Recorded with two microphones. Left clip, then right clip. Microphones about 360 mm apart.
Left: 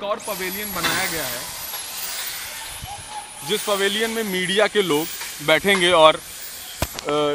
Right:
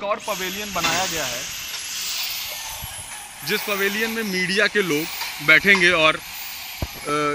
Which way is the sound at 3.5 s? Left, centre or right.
Centre.